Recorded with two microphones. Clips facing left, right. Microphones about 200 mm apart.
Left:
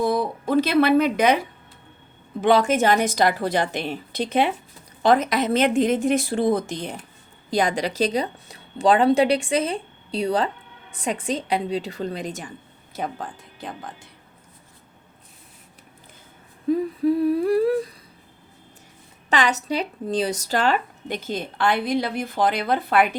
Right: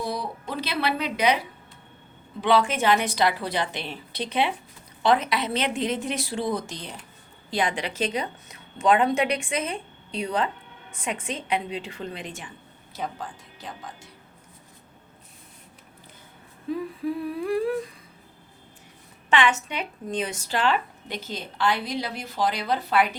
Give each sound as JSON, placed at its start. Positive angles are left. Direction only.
{"t": 0.0, "sound": "speech", "side_deg": 50}
{"t": 2.4, "sound": "speech", "side_deg": 45}
{"t": 7.5, "sound": "a woman's voice", "side_deg": 40}
{"t": 13.0, "sound": "speech", "side_deg": 55}
{"t": 16.7, "sound": "a woman's voice", "side_deg": 40}
{"t": 19.3, "sound": "speech", "side_deg": 40}